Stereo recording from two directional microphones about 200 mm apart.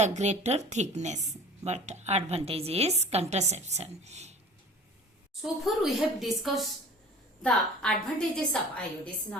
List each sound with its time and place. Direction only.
0.0 s a woman's voice: 35° right (ahead or behind)
5.4 s a woman's voice: centre (ahead or behind)